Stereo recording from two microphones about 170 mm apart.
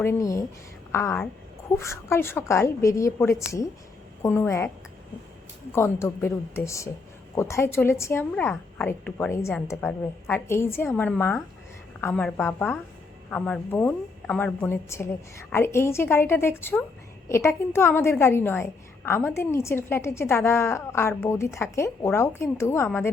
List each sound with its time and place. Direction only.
0.0 s a woman's voice: 15° left (ahead or behind)
5.7 s a woman's voice: 15° left (ahead or behind)